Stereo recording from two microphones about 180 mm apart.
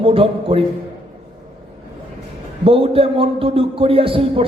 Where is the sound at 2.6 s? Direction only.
30° right (ahead or behind).